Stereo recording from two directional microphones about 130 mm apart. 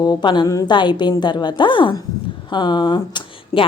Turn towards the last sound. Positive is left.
turn(degrees=35)  # may be behind; listen again after turning